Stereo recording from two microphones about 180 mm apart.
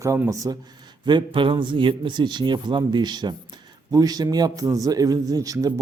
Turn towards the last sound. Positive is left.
turn(degrees=-20)  # may be behind; listen again after turning